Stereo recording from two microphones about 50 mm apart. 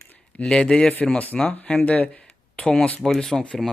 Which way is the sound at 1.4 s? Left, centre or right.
Left.